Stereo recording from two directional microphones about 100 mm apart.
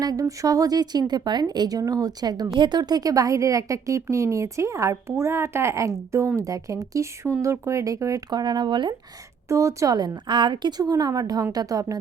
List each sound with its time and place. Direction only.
0.0 s speech: 35° right (ahead or behind)
9.5 s speech: 30° right (ahead or behind)